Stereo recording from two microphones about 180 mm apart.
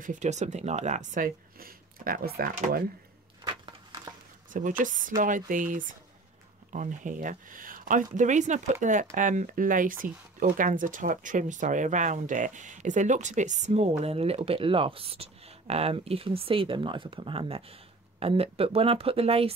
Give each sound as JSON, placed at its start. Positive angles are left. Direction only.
{"t": 0.0, "sound": "speech", "side_deg": -45}
{"t": 4.5, "sound": "speech", "side_deg": -45}